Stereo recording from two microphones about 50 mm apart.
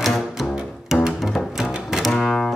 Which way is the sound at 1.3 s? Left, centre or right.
Left.